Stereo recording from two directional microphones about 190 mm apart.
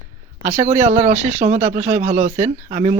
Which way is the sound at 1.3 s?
35° right (ahead or behind).